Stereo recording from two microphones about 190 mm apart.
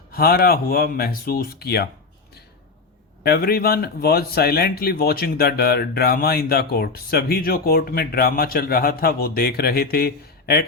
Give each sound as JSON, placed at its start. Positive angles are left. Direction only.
{"t": 0.1, "sound": "speech", "side_deg": 55}
{"t": 3.2, "sound": "speech", "side_deg": 55}